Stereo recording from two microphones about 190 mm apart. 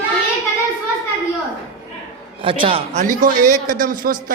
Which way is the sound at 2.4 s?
30° right (ahead or behind).